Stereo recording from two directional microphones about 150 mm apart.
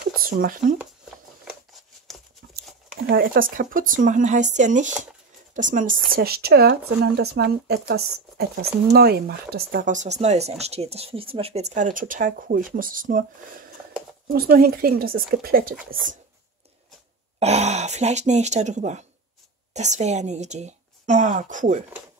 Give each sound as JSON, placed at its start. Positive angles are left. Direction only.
{"t": 0.0, "sound": "a sound", "side_deg": -75}
{"t": 2.1, "sound": "a sound", "side_deg": 0}
{"t": 3.2, "sound": "speech", "side_deg": -70}
{"t": 6.1, "sound": "speech", "side_deg": -90}
{"t": 14.3, "sound": "speech", "side_deg": -85}
{"t": 17.4, "sound": "speech", "side_deg": -45}